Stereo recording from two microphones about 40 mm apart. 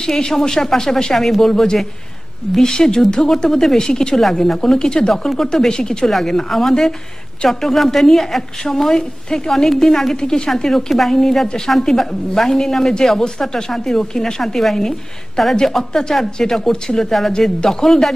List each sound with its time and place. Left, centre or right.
0.0 s a woman's voice: centre
4.6 s a woman's voice: centre
6.0 s a woman's voice: centre
10.1 s a woman's voice: centre
10.5 s a woman's voice: centre
17.6 s a woman's voice: centre